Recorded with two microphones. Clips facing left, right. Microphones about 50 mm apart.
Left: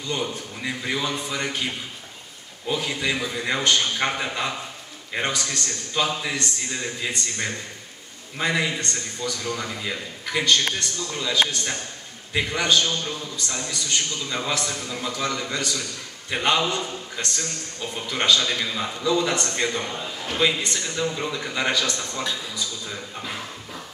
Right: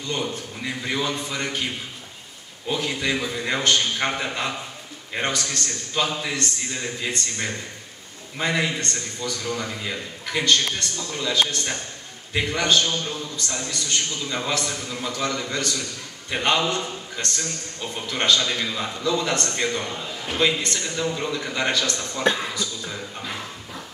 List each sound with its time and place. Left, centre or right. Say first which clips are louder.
0.1 s a man's voice: even; centre
2.7 s a man's voice: right 1 dB; centre
8.4 s a man's voice: even; centre
12.4 s a man's voice: even; centre
22.2 s speech: right 10 dB; right
22.8 s speech: right 1 dB; centre